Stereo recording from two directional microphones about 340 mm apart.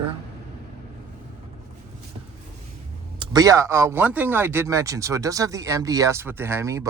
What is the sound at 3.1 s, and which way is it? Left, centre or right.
Speech, centre.